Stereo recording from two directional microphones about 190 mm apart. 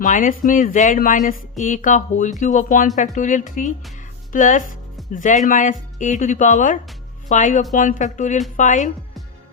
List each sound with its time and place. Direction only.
0.0 s speech: 45° left (ahead or behind)